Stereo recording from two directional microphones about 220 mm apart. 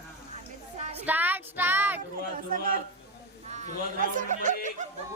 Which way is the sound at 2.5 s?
40° right (ahead or behind).